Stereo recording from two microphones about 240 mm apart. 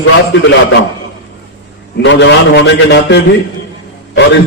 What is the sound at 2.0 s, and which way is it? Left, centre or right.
A man's voice, left.